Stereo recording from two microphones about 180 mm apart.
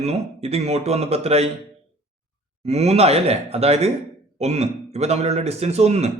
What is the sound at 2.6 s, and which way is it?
A man's voice, 35° right (ahead or behind).